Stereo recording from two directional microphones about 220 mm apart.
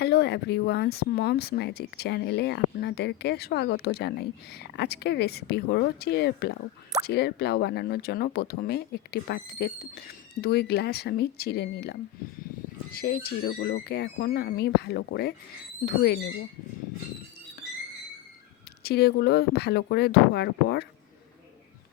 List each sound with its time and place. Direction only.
0.0 s speech: 50° left (ahead or behind)
18.8 s speech: 45° left (ahead or behind)